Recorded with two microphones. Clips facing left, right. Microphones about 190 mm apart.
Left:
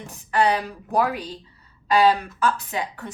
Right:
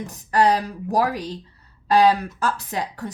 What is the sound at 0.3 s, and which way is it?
A woman's voice, 40° right (ahead or behind).